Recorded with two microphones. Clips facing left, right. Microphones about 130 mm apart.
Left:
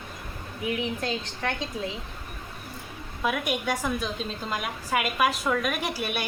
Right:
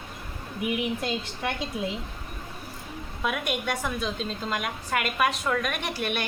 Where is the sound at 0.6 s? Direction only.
10° right (ahead or behind).